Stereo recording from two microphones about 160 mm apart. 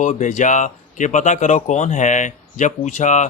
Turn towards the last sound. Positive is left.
turn(degrees=50)  # may be behind; listen again after turning